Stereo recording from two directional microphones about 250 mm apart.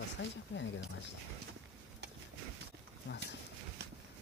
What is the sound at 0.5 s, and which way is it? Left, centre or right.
Speech, left.